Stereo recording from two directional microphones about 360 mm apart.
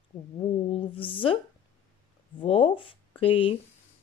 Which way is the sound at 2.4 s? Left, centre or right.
Centre.